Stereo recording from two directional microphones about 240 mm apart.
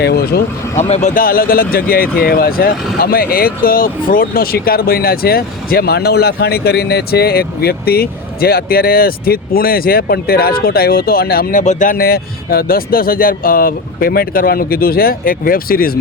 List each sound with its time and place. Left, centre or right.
0.0 s speech: left
0.8 s speech: left